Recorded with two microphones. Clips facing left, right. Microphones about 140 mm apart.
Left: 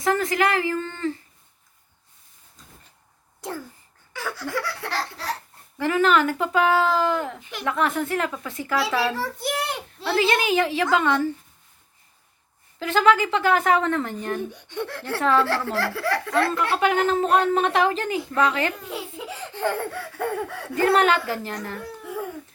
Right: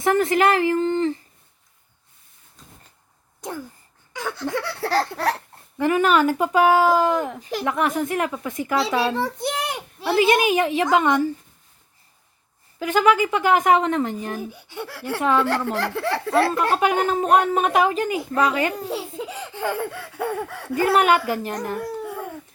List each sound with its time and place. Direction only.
0.0 s speech: 25° right (ahead or behind)
3.4 s speech: 15° right (ahead or behind)
4.1 s a sound: 20° right (ahead or behind)
4.9 s laughter: 45° right (ahead or behind)
5.7 s a child's voice: 15° right (ahead or behind)
12.8 s a child's voice: 15° right (ahead or behind)
14.3 s a child's voice: 5° right (ahead or behind); by 16.5 s 30° right (ahead or behind)
16.7 s a child's voice: 15° right (ahead or behind)
18.7 s speech: 35° right (ahead or behind)
19.5 s a child's voice: 10° right (ahead or behind)
22.0 s a sound: centre (ahead or behind)